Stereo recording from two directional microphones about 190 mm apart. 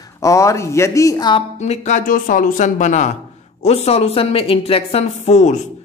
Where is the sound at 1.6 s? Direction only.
35° left (ahead or behind).